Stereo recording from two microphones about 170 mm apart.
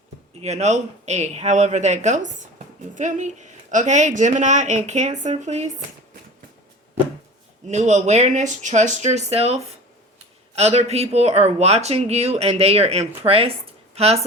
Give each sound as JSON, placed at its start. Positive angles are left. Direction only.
{"t": 0.4, "sound": "speech", "side_deg": -40}
{"t": 7.7, "sound": "speech", "side_deg": -45}